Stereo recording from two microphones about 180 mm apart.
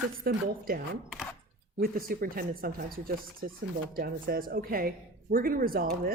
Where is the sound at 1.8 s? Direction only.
55° right (ahead or behind).